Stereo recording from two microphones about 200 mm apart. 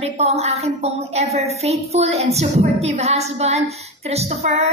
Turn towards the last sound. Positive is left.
turn(degrees=-35)  # may be behind; listen again after turning